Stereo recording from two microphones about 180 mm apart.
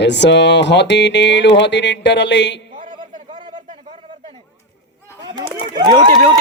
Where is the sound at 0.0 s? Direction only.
70° left (ahead or behind).